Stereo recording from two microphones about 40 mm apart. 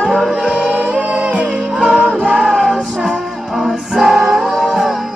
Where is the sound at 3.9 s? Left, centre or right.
Centre.